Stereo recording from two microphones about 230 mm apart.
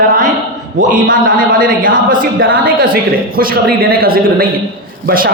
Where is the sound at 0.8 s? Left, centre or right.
Right.